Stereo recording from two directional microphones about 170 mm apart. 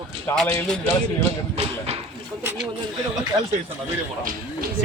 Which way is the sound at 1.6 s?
35° right (ahead or behind).